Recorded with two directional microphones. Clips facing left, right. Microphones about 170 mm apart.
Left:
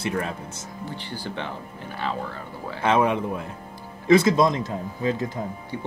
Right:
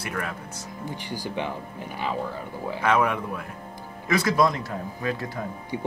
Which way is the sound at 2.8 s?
25° left (ahead or behind).